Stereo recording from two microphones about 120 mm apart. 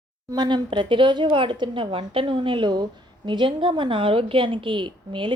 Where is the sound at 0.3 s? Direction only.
35° right (ahead or behind).